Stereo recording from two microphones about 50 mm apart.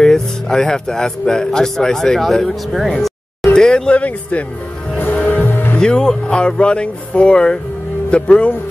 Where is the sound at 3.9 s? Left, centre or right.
Left.